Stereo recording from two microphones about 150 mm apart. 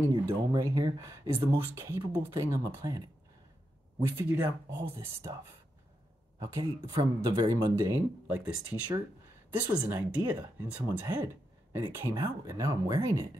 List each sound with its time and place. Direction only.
0.0 s speech: 20° right (ahead or behind)
4.0 s speech: 15° right (ahead or behind)
6.4 s speech: 25° right (ahead or behind)
9.5 s speech: 15° right (ahead or behind)